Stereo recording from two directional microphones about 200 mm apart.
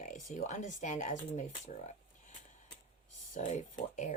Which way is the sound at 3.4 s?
35° left (ahead or behind).